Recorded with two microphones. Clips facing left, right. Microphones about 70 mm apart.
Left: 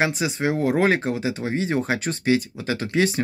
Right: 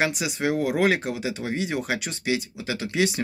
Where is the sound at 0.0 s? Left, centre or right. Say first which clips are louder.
Left 2 dB; left.